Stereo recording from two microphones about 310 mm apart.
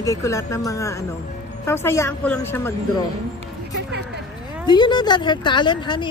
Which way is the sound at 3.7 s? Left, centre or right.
Right.